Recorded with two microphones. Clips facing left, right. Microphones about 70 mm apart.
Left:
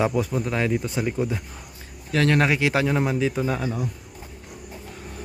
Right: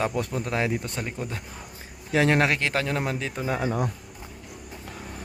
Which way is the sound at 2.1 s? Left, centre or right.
Centre.